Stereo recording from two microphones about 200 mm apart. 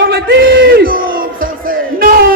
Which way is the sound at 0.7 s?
45° right (ahead or behind).